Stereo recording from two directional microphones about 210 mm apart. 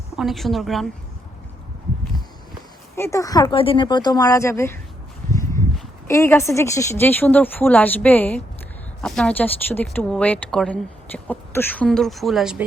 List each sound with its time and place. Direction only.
0.2 s speech: centre (ahead or behind)
2.9 s a woman's voice: 15° left (ahead or behind)
5.3 s a sound: 15° left (ahead or behind)
6.1 s a woman's voice: 15° left (ahead or behind)